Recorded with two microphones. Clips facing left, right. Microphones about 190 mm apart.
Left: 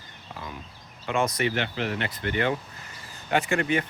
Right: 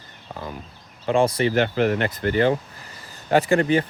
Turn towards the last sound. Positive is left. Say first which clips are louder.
# right 6 dB
turn(degrees=-35)  # may be behind; listen again after turning